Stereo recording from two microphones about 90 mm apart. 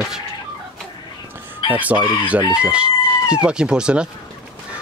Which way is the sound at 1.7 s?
15° right (ahead or behind).